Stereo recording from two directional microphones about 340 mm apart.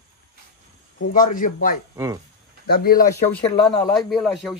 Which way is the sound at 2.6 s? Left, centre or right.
Left.